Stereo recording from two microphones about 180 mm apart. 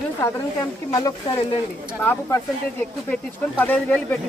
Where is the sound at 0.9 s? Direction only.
20° left (ahead or behind).